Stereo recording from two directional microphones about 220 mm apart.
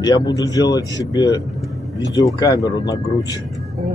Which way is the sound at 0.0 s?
20° left (ahead or behind).